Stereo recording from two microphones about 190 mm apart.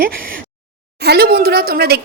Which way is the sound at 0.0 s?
50° right (ahead or behind).